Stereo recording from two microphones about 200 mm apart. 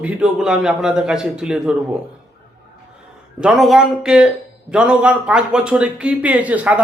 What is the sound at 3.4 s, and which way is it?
Speech, centre (ahead or behind).